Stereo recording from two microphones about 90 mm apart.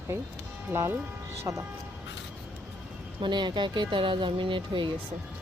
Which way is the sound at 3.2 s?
55° right (ahead or behind).